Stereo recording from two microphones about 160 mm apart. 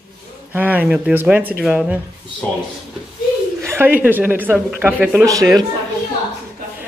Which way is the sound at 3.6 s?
15° right (ahead or behind).